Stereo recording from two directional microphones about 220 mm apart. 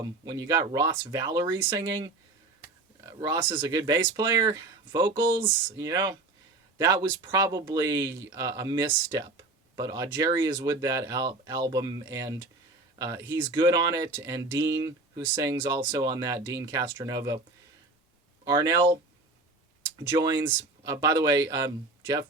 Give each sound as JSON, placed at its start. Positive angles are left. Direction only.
{"t": 0.3, "sound": "speech", "side_deg": -15}
{"t": 3.1, "sound": "speech", "side_deg": -15}
{"t": 18.4, "sound": "speech", "side_deg": -15}
{"t": 20.4, "sound": "speech", "side_deg": -15}